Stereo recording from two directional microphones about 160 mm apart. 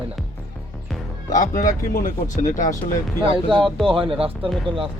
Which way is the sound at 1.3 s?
55° left (ahead or behind).